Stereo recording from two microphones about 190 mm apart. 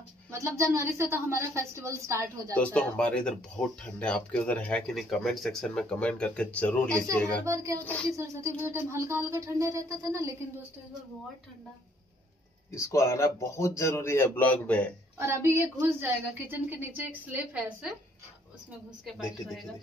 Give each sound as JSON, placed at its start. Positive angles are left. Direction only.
{"t": 0.3, "sound": "a woman's voice", "side_deg": -15}
{"t": 2.5, "sound": "speech", "side_deg": 5}
{"t": 7.4, "sound": "a woman's voice", "side_deg": -15}
{"t": 7.8, "sound": "a man's voice", "side_deg": 10}
{"t": 8.6, "sound": "a woman's voice", "side_deg": -15}
{"t": 12.7, "sound": "a man's voice", "side_deg": 15}
{"t": 15.1, "sound": "a woman's voice", "side_deg": -15}